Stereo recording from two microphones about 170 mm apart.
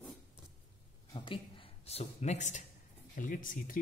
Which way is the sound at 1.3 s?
35° left (ahead or behind).